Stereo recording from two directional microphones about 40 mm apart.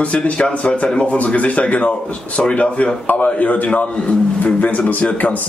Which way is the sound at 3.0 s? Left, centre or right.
Left.